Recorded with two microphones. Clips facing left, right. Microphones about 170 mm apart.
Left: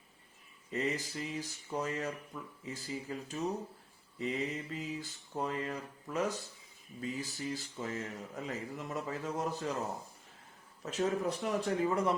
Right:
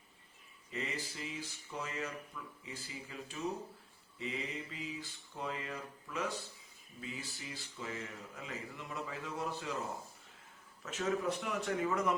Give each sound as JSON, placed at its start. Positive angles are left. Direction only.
{"t": 0.7, "sound": "speech", "side_deg": 40}
{"t": 10.8, "sound": "speech", "side_deg": 35}